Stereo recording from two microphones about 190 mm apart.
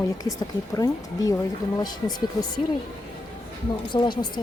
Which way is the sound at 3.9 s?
25° left (ahead or behind).